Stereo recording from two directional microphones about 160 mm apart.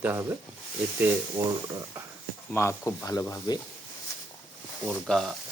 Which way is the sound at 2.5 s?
15° left (ahead or behind).